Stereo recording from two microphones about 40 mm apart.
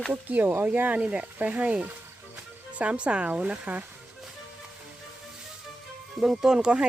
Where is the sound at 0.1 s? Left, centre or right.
Right.